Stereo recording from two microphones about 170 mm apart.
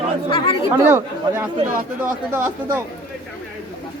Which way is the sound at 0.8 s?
10° right (ahead or behind).